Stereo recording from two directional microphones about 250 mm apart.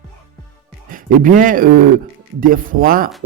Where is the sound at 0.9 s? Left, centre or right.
Right.